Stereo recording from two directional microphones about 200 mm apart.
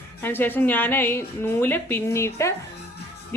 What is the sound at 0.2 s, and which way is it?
A woman's voice, 10° left (ahead or behind).